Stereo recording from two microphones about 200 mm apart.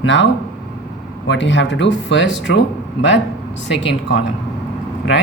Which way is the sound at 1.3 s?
65° left (ahead or behind).